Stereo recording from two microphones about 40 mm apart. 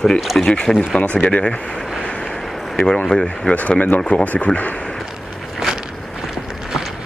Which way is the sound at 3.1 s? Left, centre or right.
Left.